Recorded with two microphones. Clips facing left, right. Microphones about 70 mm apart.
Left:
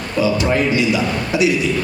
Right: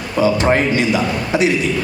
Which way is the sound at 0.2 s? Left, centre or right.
Right.